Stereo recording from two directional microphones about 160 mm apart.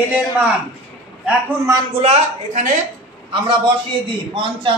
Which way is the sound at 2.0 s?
45° right (ahead or behind).